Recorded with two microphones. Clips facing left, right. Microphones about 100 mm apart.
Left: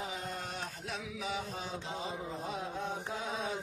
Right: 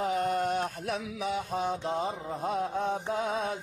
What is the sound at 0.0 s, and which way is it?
Mantra, 60° right (ahead or behind).